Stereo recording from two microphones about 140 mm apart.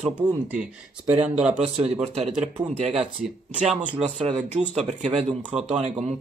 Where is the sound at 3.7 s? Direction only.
10° right (ahead or behind).